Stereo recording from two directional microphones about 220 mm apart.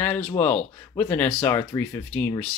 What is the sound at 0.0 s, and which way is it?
Speech, 10° left (ahead or behind).